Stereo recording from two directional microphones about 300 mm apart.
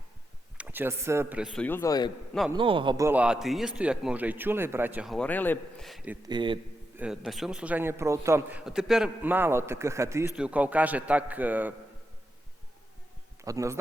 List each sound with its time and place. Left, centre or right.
0.5 s a man's voice: centre
2.6 s a man's voice: centre
6.2 s speech: centre
7.0 s a man's voice: centre
13.4 s speech: centre